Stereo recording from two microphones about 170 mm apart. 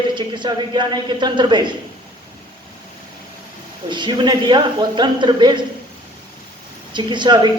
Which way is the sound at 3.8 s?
25° right (ahead or behind).